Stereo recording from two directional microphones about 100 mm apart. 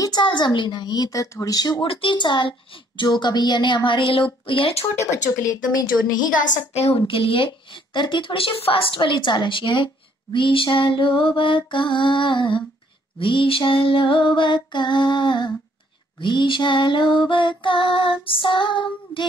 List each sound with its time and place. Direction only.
0.0 s music: 50° left (ahead or behind)
1.9 s a child's voice: 60° left (ahead or behind)
5.1 s a woman's voice: 35° left (ahead or behind)
7.1 s a child's voice: 65° left (ahead or behind)
13.2 s music: 60° left (ahead or behind)